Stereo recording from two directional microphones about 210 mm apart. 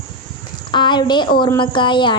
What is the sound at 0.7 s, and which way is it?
A woman's voice, 20° left (ahead or behind).